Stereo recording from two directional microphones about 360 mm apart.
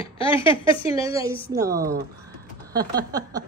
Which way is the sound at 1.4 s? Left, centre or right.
Centre.